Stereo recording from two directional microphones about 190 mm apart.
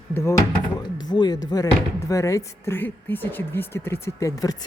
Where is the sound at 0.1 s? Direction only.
15° left (ahead or behind).